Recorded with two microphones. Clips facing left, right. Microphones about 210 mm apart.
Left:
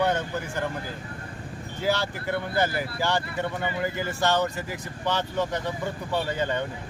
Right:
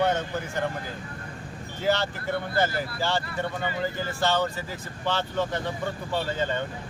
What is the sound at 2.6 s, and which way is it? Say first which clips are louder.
Speech: even; 15° left (ahead or behind).